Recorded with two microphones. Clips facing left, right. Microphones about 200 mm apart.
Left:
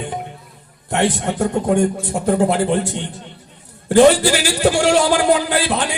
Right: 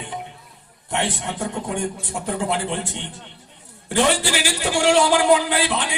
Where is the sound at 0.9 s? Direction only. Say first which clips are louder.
Left 7 dB; 45° left (ahead or behind).